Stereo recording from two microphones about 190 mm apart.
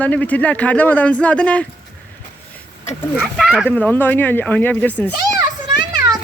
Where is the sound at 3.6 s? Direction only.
10° left (ahead or behind).